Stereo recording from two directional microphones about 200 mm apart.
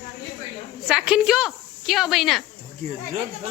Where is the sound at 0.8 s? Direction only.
5° right (ahead or behind).